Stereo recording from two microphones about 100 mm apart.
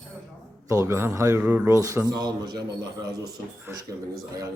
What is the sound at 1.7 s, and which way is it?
A man's voice, 30° right (ahead or behind).